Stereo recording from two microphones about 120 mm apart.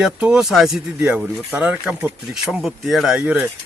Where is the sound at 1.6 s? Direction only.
10° right (ahead or behind).